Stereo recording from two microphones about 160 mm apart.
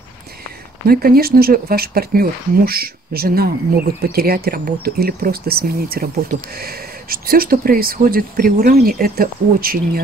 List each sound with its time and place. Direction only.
0.8 s speech: 65° right (ahead or behind)